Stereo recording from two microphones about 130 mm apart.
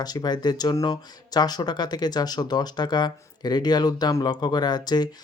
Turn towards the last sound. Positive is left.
turn(degrees=30)  # may be behind; listen again after turning